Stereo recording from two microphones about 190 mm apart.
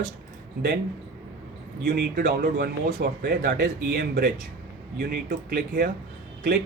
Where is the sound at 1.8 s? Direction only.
60° right (ahead or behind).